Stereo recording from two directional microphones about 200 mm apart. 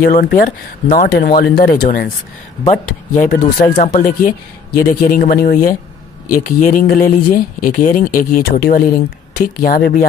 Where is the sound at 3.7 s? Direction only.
35° left (ahead or behind).